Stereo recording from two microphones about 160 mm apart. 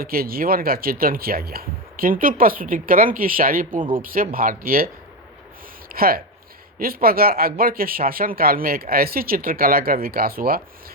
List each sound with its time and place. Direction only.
0.0 s speech: 70° right (ahead or behind)
5.9 s speech: 70° right (ahead or behind)